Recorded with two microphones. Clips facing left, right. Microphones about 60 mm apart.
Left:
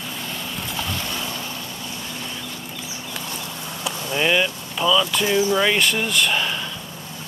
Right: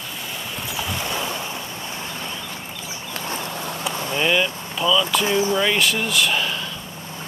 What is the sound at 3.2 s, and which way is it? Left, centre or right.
Vehicle, right.